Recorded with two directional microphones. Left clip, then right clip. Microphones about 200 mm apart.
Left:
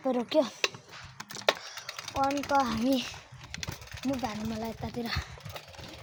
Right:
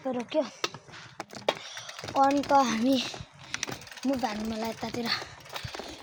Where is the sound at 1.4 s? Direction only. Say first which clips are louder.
Left 2 dB; 10° right (ahead or behind).